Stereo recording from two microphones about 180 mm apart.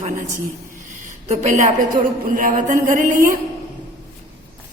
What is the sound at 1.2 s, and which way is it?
A woman's voice, 40° right (ahead or behind).